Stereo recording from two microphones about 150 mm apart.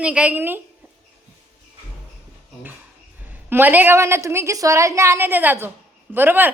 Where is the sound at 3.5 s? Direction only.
10° right (ahead or behind).